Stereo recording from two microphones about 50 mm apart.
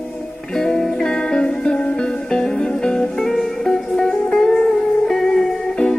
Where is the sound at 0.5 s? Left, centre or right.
Centre.